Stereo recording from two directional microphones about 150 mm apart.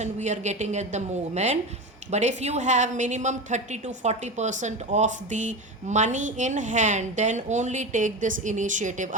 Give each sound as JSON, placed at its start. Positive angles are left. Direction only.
{"t": 0.0, "sound": "a woman's voice", "side_deg": -50}